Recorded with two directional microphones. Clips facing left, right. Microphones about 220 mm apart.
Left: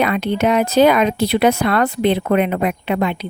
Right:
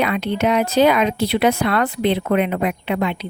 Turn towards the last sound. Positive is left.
turn(degrees=45)  # may be behind; listen again after turning